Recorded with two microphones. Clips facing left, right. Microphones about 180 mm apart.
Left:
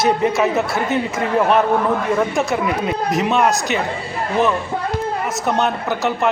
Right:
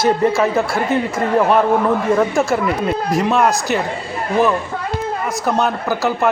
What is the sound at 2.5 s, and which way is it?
A man's voice, centre (ahead or behind).